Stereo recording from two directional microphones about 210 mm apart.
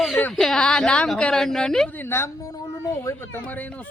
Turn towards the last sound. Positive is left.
turn(degrees=10)  # may be behind; listen again after turning